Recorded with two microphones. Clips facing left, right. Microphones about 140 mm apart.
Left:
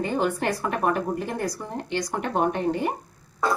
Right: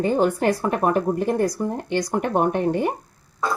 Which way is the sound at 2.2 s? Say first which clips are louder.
Right 1 dB; 55° right (ahead or behind).